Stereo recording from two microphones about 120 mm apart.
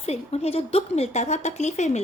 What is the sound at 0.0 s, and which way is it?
A woman's voice, 60° left (ahead or behind).